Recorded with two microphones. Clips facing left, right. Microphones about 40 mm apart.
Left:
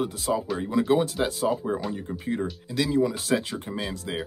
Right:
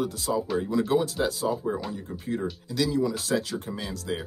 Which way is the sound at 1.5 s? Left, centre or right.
Centre.